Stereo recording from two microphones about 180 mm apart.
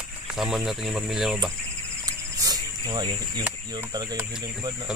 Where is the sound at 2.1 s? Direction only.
20° right (ahead or behind).